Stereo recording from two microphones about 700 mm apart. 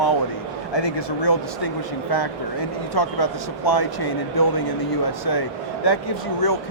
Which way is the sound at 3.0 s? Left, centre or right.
Left.